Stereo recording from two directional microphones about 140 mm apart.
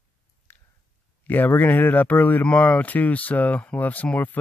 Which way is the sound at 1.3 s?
15° left (ahead or behind).